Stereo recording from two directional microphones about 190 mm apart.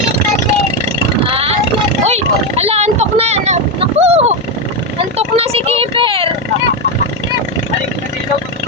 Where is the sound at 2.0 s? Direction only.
35° right (ahead or behind).